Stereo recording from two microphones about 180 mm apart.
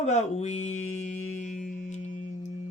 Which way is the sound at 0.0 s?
40° left (ahead or behind).